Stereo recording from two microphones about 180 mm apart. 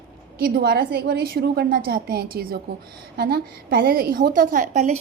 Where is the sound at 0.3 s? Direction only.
60° right (ahead or behind).